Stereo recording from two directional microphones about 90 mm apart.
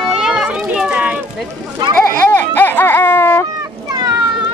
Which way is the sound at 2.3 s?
20° left (ahead or behind).